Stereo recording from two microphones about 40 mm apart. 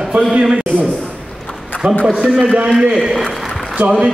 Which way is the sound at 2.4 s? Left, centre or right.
Right.